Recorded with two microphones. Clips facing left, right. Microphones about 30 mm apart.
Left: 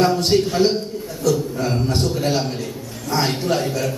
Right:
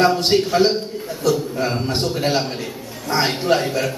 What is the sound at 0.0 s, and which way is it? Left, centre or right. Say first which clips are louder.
A man's voice: right 1 dB; right.